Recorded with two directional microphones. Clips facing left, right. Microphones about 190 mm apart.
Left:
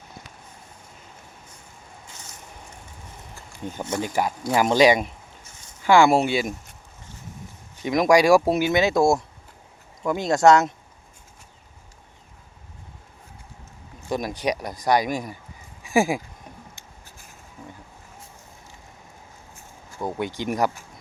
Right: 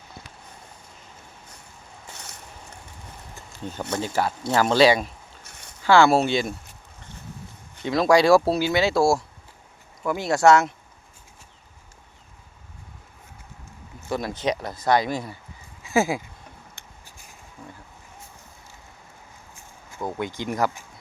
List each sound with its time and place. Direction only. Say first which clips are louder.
3.6 s speech: left 1 dB; 15° left (ahead or behind)
5.5 s a sound: right 2 dB; 65° right (ahead or behind)
5.8 s speech: even; 15° left (ahead or behind)
7.8 s speech: left 1 dB; 15° left (ahead or behind)
14.1 s speech: even; 15° left (ahead or behind)
20.0 s speech: left 1 dB; 15° left (ahead or behind)